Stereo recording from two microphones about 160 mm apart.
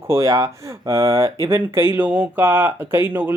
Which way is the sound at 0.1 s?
20° right (ahead or behind).